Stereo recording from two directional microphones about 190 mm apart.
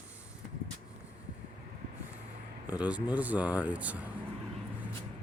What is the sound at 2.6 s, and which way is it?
Speech, 5° right (ahead or behind).